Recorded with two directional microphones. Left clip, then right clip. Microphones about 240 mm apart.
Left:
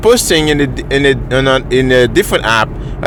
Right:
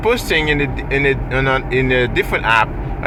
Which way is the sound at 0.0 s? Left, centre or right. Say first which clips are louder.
Left 6 dB; left.